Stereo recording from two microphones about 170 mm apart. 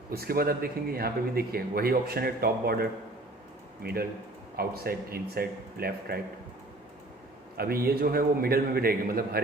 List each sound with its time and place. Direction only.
0.1 s speech: 65° right (ahead or behind)
3.8 s speech: 60° right (ahead or behind)
7.5 s speech: 65° right (ahead or behind)